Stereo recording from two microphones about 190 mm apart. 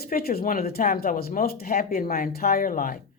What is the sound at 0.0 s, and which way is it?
Speech, 55° left (ahead or behind).